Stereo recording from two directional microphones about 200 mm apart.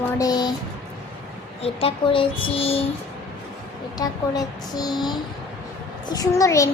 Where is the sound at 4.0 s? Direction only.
20° left (ahead or behind).